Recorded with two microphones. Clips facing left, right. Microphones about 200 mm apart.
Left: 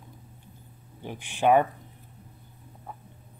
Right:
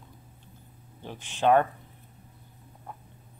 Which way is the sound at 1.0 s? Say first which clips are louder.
Left 1 dB; 15° left (ahead or behind).